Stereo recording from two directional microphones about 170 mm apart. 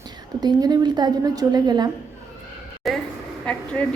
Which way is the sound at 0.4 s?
25° right (ahead or behind).